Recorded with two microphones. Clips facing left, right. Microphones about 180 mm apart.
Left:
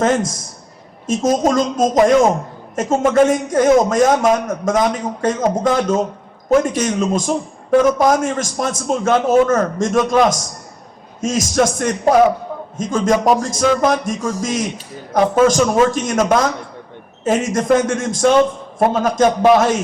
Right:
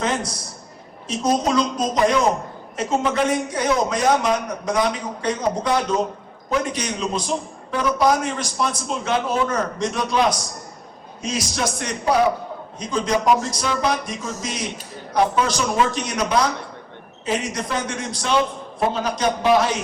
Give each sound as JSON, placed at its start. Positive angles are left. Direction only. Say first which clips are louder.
{"t": 0.0, "sound": "a man's voice", "louder": "left 8 dB", "side_deg": 45}
{"t": 6.5, "sound": "a man's voice", "louder": "left 9 dB", "side_deg": 45}